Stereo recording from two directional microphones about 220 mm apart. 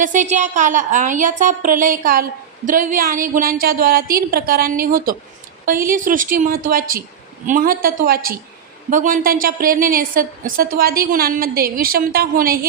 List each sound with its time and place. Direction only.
0.0 s a woman's voice: 35° right (ahead or behind)